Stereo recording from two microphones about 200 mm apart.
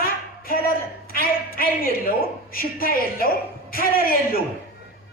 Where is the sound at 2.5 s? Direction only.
45° left (ahead or behind).